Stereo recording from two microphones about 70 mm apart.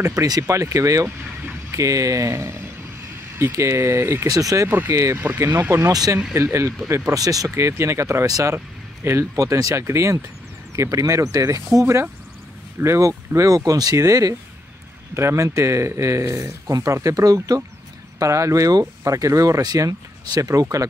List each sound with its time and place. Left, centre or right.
0.1 s speech: right
4.3 s speech: right
4.6 s speech: right
5.9 s speech: right
6.3 s speech: right
7.2 s speech: right
7.4 s speech: right
8.3 s speech: right
9.0 s speech: right
9.4 s speech: right
13.0 s speech: right
13.6 s speech: right
13.9 s speech: right
18.2 s speech: right